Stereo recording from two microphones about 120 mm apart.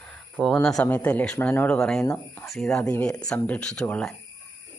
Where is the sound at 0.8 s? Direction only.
15° left (ahead or behind).